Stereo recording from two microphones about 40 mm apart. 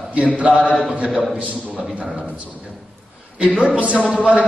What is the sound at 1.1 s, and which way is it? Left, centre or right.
Speech, centre.